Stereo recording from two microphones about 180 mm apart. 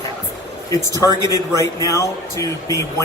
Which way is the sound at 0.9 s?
20° left (ahead or behind).